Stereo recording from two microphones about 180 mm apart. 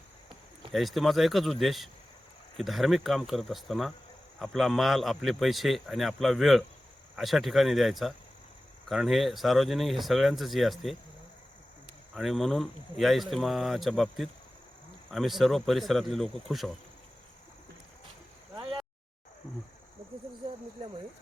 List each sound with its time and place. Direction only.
0.7 s speech: centre (ahead or behind)
12.1 s speech: centre (ahead or behind)
18.5 s a sound: 30° right (ahead or behind)